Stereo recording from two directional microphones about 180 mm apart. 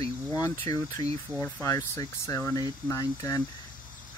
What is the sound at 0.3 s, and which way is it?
Speech, 15° left (ahead or behind).